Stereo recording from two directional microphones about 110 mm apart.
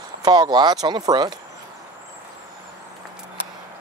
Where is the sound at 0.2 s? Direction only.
40° right (ahead or behind).